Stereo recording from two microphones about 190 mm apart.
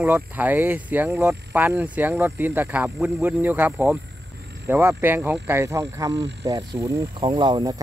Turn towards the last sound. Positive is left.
turn(degrees=-25)  # may be behind; listen again after turning